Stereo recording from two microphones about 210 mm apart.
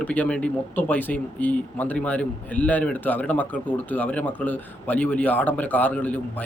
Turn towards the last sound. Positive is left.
turn(degrees=5)  # may be behind; listen again after turning